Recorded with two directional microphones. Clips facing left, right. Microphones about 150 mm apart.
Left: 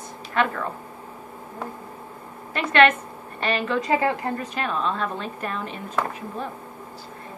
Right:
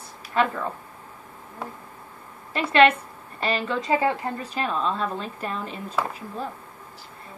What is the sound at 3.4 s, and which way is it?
A woman's voice, 35° right (ahead or behind).